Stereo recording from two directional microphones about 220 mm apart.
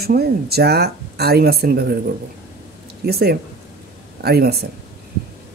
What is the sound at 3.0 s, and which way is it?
Speech, 45° right (ahead or behind).